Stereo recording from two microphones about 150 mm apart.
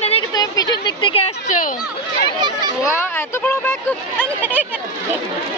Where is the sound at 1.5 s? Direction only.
60° left (ahead or behind).